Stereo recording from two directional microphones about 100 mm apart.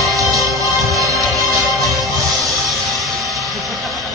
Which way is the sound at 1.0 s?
35° right (ahead or behind).